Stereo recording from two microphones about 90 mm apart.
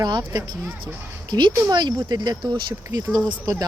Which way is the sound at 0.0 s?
50° right (ahead or behind).